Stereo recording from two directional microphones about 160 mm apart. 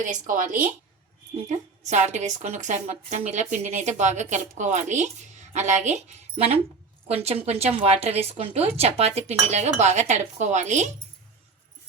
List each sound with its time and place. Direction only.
0.0 s a woman's voice: 55° right (ahead or behind)